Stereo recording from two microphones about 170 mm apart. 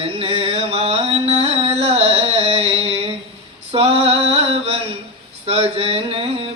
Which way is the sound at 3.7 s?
35° right (ahead or behind).